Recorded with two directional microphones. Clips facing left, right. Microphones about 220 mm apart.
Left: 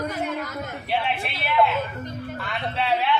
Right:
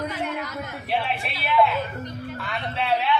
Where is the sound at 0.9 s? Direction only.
Centre (ahead or behind).